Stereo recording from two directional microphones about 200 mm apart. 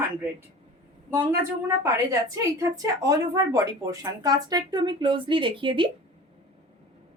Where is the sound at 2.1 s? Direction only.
15° right (ahead or behind).